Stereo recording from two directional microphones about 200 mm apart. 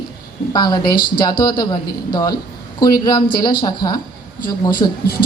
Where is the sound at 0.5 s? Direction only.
20° left (ahead or behind).